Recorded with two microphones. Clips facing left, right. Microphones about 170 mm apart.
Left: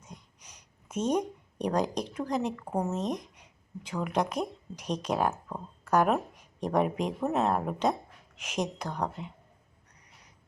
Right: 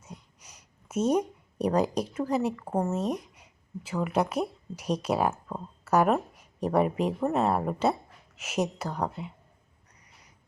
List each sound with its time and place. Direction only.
0.0 s speech: 10° right (ahead or behind)